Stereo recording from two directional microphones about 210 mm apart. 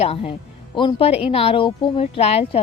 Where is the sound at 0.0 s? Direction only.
30° left (ahead or behind).